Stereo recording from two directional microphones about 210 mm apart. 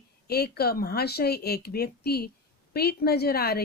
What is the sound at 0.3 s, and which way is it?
A woman's voice, 50° left (ahead or behind).